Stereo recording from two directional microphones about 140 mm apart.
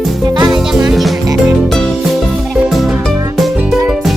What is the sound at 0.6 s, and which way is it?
Music, 5° right (ahead or behind).